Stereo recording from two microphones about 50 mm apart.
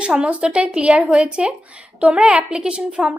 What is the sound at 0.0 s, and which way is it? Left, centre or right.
A woman's voice, right.